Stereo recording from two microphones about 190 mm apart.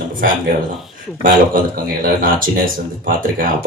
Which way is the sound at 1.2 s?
50° right (ahead or behind).